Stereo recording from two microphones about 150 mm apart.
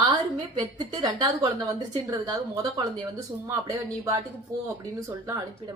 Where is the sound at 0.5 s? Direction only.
30° right (ahead or behind).